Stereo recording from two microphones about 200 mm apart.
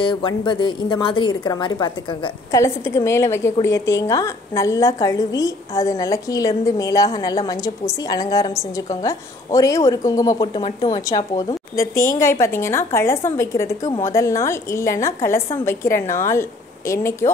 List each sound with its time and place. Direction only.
0.0 s a woman's voice: 20° left (ahead or behind)